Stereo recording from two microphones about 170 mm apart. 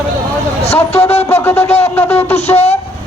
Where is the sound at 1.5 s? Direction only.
35° left (ahead or behind).